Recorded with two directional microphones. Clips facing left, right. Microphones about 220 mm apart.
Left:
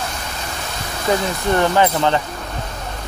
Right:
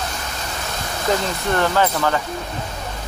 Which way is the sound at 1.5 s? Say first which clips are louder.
Left 3 dB; 15° left (ahead or behind).